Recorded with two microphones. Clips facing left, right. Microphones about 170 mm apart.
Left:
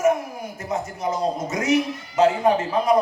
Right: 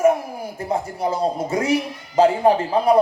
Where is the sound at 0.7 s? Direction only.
30° right (ahead or behind).